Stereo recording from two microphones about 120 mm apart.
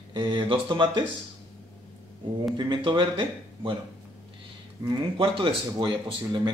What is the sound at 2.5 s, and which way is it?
Speech, 40° right (ahead or behind).